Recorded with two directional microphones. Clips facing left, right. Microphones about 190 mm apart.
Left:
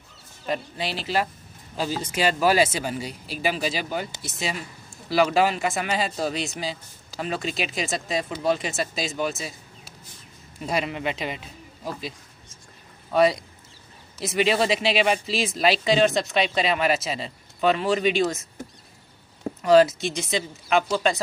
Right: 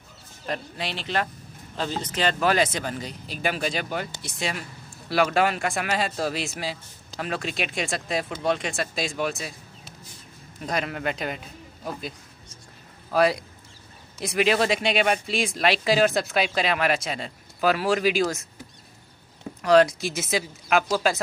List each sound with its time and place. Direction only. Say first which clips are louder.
0.5 s speech: left 3 dB; centre (ahead or behind)
10.7 s speech: left 1 dB; 5° left (ahead or behind)
13.1 s speech: left 2 dB; centre (ahead or behind)
19.6 s speech: left 1 dB; centre (ahead or behind)